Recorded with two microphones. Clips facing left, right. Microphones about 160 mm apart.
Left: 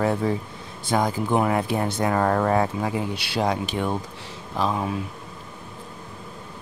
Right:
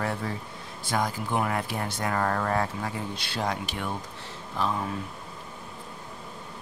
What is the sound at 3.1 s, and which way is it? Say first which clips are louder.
Speech: left 7 dB; 80° left.